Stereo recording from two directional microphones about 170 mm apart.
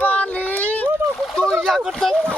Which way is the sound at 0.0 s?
10° left (ahead or behind).